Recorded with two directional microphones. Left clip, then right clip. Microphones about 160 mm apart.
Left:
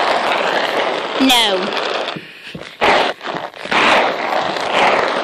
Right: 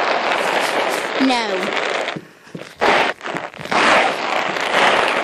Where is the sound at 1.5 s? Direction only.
45° left (ahead or behind).